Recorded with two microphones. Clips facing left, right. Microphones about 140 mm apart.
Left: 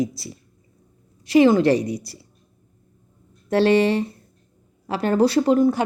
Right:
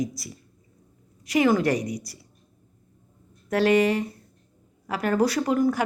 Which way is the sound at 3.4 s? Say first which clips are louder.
Left 3 dB; 30° left (ahead or behind).